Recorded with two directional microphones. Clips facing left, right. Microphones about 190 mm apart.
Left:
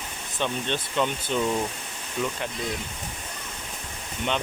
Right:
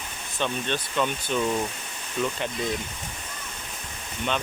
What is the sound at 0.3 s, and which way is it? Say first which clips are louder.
Speech: even; 15° left (ahead or behind).